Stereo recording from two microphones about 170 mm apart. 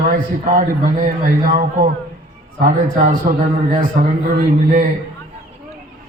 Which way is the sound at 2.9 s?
50° right (ahead or behind).